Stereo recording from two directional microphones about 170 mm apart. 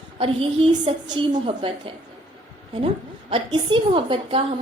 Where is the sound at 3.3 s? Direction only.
30° right (ahead or behind).